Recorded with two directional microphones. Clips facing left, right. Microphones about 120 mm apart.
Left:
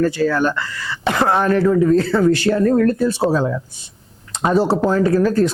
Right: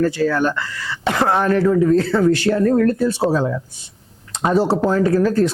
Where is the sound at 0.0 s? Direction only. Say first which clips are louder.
Left 1 dB; 25° left (ahead or behind).